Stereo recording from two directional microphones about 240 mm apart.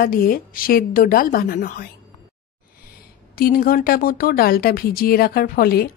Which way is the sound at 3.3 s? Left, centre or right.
Left.